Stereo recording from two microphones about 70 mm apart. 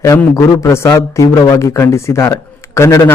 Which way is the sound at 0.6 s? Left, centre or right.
Left.